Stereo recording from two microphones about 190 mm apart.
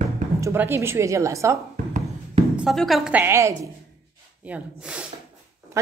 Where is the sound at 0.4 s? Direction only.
15° right (ahead or behind).